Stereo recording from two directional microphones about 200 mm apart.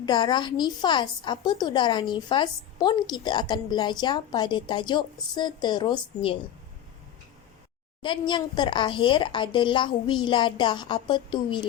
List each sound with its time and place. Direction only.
0.0 s a woman's voice: 20° left (ahead or behind)
8.0 s a woman's voice: 25° left (ahead or behind)